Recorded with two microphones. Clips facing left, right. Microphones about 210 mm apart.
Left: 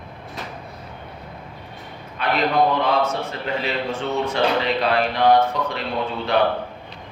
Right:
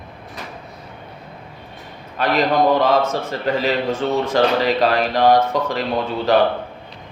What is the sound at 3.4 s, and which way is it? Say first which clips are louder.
Speech: right 7 dB; 40° right (ahead or behind).